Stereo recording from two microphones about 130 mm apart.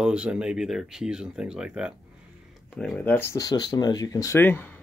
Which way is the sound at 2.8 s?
10° left (ahead or behind).